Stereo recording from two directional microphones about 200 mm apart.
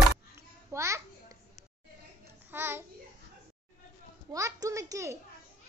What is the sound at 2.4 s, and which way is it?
Child singing, 10° right (ahead or behind).